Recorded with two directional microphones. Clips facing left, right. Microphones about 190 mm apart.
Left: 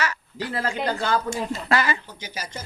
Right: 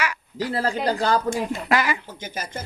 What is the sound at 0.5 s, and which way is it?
Speech, 35° right (ahead or behind).